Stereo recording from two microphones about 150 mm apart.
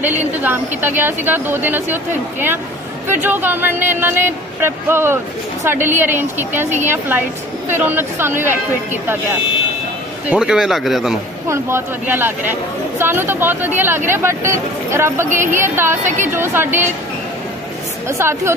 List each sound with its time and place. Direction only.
0.4 s speech: 15° right (ahead or behind)
3.1 s speech: 15° right (ahead or behind)
10.3 s a man's voice: 5° right (ahead or behind)
11.4 s speech: 15° right (ahead or behind)
18.0 s speech: 15° right (ahead or behind)